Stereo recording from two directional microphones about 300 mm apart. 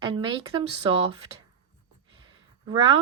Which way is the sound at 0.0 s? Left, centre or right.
Centre.